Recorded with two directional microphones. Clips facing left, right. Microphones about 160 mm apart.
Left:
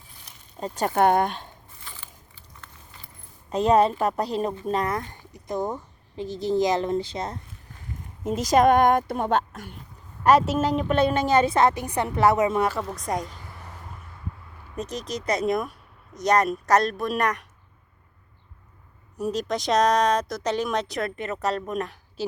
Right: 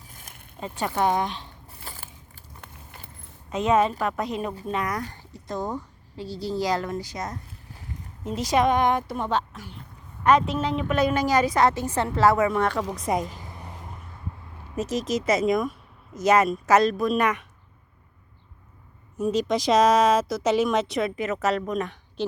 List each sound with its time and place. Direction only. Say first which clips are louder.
0.1 s a sound: right 2 dB; 50° right (ahead or behind)
0.6 s a woman's voice: left 4 dB; 40° left (ahead or behind)
1.8 s biting: right 4 dB; 40° right (ahead or behind)
3.5 s a woman's voice: left 2 dB; 35° left (ahead or behind)
8.2 s a woman's voice: left 3 dB; 45° left (ahead or behind)
10.2 s a woman's voice: left 2 dB; 40° left (ahead or behind); by 12.6 s 20° left (ahead or behind)
13.0 s speech: right 3 dB; 5° right (ahead or behind)
13.4 s a sound: right 2 dB; 20° right (ahead or behind)
14.8 s speech: right 5 dB; 5° right (ahead or behind)
19.1 s speech: right 3 dB; centre (ahead or behind)